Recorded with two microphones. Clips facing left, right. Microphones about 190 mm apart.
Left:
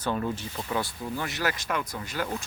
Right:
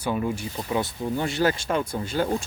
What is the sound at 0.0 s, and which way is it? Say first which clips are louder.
Speech: right 3 dB; 10° right (ahead or behind).